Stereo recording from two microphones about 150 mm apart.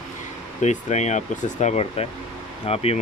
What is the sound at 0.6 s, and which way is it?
Speech, 50° left (ahead or behind).